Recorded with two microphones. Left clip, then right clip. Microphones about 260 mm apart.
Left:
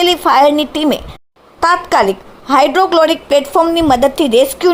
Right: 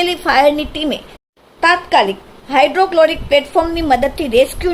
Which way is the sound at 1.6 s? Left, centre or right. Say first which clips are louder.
Left 1 dB; left.